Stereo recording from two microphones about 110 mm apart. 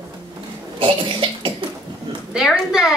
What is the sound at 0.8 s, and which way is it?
Cough, 55° right (ahead or behind).